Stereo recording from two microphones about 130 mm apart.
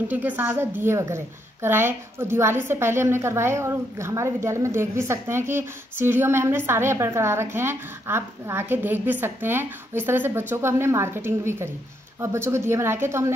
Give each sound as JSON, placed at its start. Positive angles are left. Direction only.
{"t": 0.1, "sound": "a woman's voice", "side_deg": -15}